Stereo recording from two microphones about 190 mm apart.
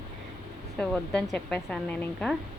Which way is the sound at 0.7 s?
5° left (ahead or behind).